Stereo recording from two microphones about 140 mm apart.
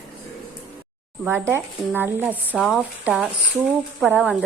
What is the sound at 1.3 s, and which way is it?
A woman's voice, 15° right (ahead or behind).